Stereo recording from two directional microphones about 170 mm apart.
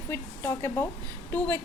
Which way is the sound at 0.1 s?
15° left (ahead or behind).